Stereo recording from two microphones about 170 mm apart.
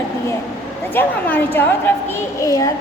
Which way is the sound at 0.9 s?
10° left (ahead or behind).